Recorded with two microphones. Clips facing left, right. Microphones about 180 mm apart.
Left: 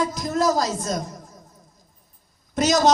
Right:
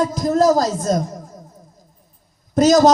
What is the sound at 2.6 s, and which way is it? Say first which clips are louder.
Speech: right 7 dB; 35° right (ahead or behind).